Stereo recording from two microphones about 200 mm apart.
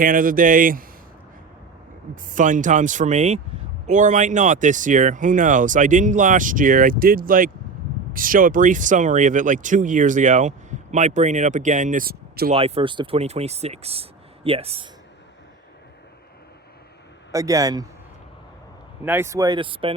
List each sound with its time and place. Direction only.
0.0 s speech: 45° right (ahead or behind)
2.3 s speech: 40° right (ahead or behind)
12.5 s speech: 30° right (ahead or behind)
17.3 s a man's voice: 15° right (ahead or behind)
19.0 s speech: 10° right (ahead or behind); by 20.0 s 25° right (ahead or behind)